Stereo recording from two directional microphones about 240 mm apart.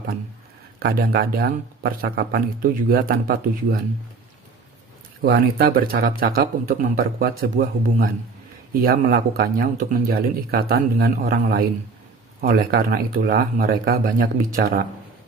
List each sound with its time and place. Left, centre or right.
0.8 s speech: right
5.2 s speech: right